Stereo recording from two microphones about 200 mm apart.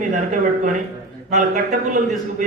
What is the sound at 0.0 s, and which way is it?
A man's voice, 40° right (ahead or behind).